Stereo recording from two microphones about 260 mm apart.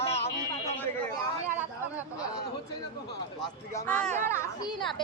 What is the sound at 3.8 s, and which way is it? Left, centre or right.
Speech, centre.